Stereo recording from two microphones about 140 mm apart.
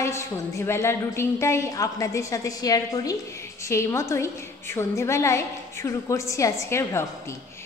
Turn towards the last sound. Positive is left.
turn(degrees=20)  # may be behind; listen again after turning